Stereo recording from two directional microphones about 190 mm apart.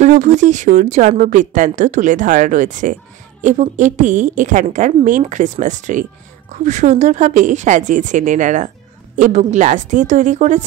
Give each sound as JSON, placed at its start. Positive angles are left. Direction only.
{"t": 0.0, "sound": "speech", "side_deg": -40}